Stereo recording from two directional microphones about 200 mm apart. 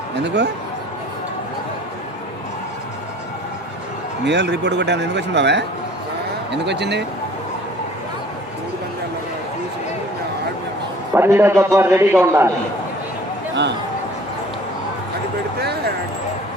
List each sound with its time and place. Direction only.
0.2 s speech: 60° right (ahead or behind)
4.3 s speech: 60° right (ahead or behind)
11.1 s a man's voice: 10° right (ahead or behind)